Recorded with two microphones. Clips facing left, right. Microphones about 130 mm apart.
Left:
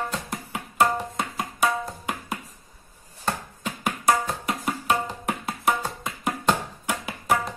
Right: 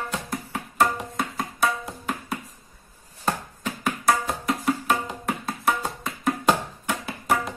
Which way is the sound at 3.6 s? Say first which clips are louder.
Even; 15° left (ahead or behind).